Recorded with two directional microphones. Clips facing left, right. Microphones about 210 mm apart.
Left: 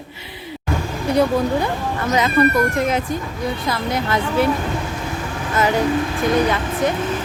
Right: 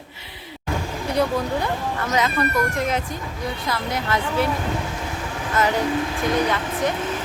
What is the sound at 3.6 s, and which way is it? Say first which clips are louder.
Speech: left 2 dB; 20° left (ahead or behind).